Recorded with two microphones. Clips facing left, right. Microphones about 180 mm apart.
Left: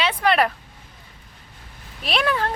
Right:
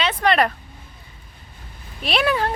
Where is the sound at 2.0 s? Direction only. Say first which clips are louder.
Right 2 dB; centre (ahead or behind).